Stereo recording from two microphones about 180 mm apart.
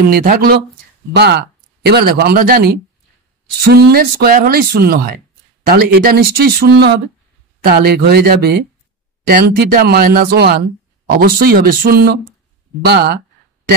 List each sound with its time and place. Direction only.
0.1 s speech: 55° right (ahead or behind)
1.1 s speech: 70° right (ahead or behind)
11.1 s speech: 55° right (ahead or behind)